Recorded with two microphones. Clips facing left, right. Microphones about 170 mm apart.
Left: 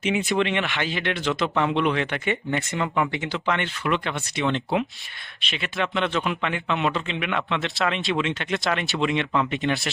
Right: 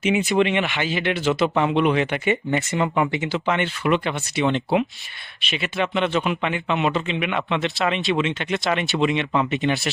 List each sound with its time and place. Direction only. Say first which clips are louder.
0.0 s a man's voice: right 4 dB; 5° right (ahead or behind)
2.6 s a man's voice: right 3 dB; 20° right (ahead or behind); by 9.9 s centre (ahead or behind)